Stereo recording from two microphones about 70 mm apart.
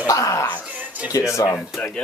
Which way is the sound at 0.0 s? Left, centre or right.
Left.